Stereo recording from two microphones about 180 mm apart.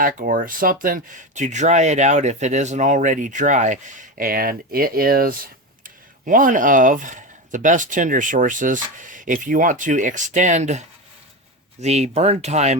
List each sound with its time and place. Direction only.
0.0 s speech: 50° right (ahead or behind)